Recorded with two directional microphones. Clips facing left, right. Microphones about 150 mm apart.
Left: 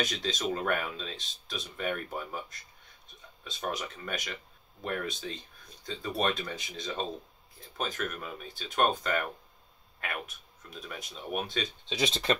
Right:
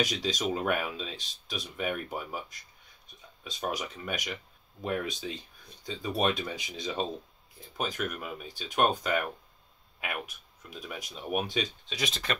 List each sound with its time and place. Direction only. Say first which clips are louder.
0.0 s speech: right 2 dB; 15° right (ahead or behind)
3.4 s speech: right 1 dB; 15° right (ahead or behind)
11.9 s speech: left 8 dB; 30° left (ahead or behind)